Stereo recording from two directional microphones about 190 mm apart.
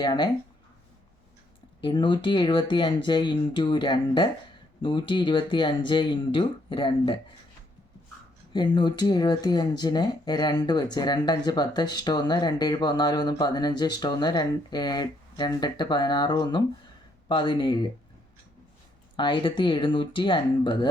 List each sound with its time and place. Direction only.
0.0 s speech: 20° left (ahead or behind)
1.8 s speech: 25° left (ahead or behind)
8.5 s speech: 25° left (ahead or behind)
19.1 s speech: 25° left (ahead or behind)